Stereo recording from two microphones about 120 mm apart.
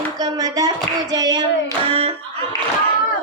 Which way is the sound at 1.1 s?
35° right (ahead or behind).